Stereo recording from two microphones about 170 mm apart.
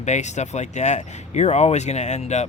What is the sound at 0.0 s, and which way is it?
Speech, 45° left (ahead or behind).